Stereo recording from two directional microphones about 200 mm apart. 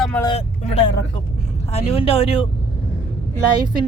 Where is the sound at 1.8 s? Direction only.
30° left (ahead or behind).